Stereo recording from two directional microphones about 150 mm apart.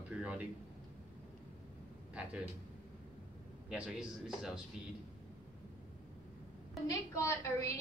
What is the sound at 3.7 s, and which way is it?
Speech, 5° right (ahead or behind).